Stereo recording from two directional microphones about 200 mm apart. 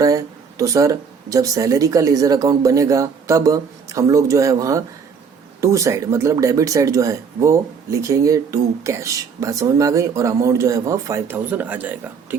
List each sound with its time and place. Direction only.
0.0 s speech: 15° right (ahead or behind)